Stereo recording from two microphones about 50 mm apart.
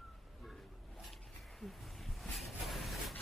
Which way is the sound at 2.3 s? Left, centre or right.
Centre.